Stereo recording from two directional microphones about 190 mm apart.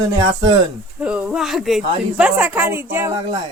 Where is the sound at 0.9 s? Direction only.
5° right (ahead or behind).